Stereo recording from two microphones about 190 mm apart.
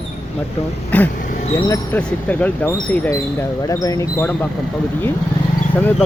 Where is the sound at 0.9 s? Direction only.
10° left (ahead or behind).